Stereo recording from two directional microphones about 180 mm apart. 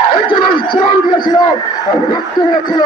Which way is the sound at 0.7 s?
25° left (ahead or behind).